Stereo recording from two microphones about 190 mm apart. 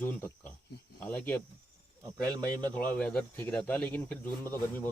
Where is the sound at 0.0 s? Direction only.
10° left (ahead or behind).